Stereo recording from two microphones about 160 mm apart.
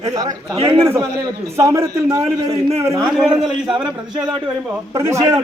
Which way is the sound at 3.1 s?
5° right (ahead or behind).